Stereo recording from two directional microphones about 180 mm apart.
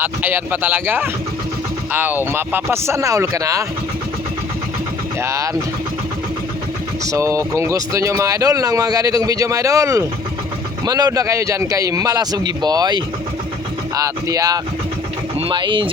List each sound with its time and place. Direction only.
0.0 s speech: 10° right (ahead or behind)
5.2 s speech: 15° right (ahead or behind)
7.0 s a man's voice: 15° right (ahead or behind)